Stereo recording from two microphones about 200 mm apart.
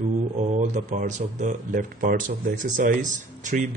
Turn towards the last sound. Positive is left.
turn(degrees=-40)  # may be behind; listen again after turning